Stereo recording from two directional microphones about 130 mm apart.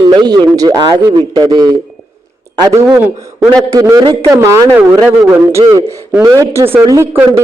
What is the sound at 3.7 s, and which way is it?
Speech, 30° right (ahead or behind).